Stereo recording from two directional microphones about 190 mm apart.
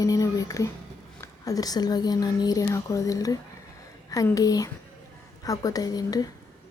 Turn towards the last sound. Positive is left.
turn(degrees=20)  # may be behind; listen again after turning